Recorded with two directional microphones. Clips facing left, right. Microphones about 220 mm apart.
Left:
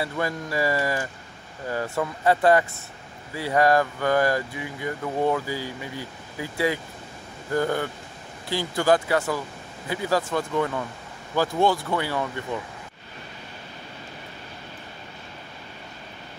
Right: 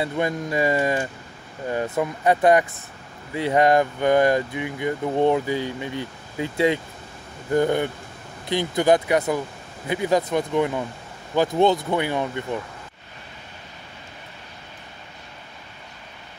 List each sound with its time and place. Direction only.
0.0 s speech: 20° right (ahead or behind)